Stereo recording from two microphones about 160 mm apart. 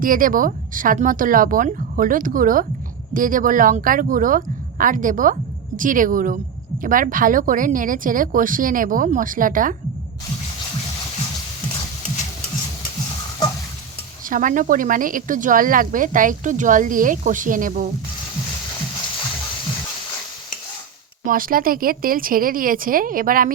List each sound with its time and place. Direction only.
0.0 s speech: 60° right (ahead or behind)
14.3 s speech: 55° right (ahead or behind)
21.2 s speech: 60° right (ahead or behind)